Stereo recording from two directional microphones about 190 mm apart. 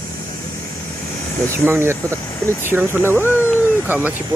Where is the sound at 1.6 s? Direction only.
10° right (ahead or behind).